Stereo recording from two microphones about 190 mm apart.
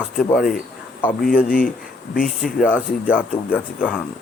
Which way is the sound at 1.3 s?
45° left (ahead or behind).